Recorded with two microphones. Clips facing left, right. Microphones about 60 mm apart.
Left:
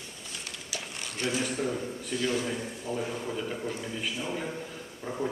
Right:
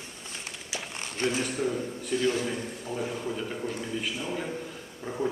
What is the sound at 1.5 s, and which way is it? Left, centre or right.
A man's voice, centre.